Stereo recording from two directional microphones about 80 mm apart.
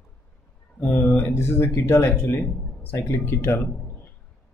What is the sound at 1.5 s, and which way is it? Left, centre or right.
Speech, left.